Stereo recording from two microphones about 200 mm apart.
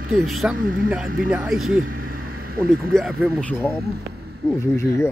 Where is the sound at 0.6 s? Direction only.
45° right (ahead or behind).